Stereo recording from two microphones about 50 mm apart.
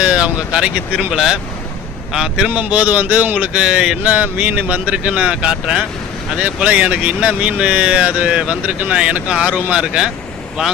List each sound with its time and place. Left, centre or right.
0.0 s speech: right
0.9 s speech: centre
2.5 s speech: right
3.6 s speech: centre
4.0 s speech: right
6.3 s speech: right